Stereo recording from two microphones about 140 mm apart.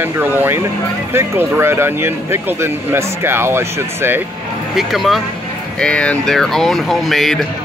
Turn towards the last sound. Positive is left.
turn(degrees=0)  # may be behind; listen again after turning